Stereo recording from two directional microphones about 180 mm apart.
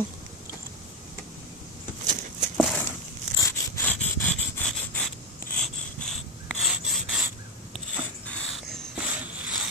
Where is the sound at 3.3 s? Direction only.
15° left (ahead or behind).